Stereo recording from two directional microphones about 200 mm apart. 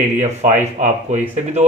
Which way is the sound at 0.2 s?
35° right (ahead or behind).